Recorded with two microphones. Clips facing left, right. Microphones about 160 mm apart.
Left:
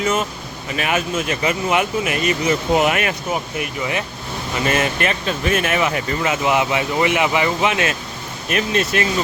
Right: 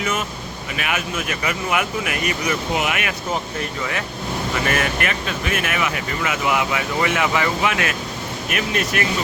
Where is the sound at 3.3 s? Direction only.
15° left (ahead or behind).